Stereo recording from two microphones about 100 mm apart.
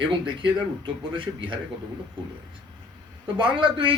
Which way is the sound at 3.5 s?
55° right (ahead or behind).